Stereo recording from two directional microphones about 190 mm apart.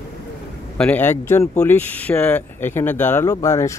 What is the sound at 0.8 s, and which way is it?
Speech, 10° left (ahead or behind).